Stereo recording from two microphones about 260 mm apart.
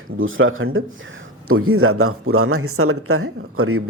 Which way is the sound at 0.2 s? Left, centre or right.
Right.